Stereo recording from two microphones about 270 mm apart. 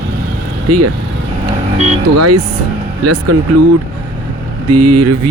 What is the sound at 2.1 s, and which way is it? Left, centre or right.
Speech, right.